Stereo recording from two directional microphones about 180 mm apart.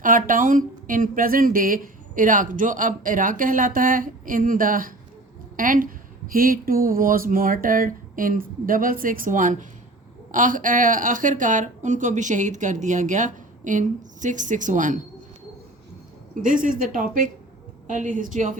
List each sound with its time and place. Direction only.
0.3 s speech: 50° right (ahead or behind)
16.3 s speech: 45° right (ahead or behind)